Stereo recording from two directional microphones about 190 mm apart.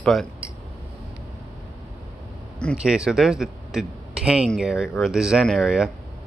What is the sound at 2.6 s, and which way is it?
Speech, centre (ahead or behind).